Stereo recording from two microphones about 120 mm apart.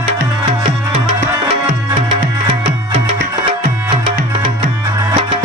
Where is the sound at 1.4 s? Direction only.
55° right (ahead or behind).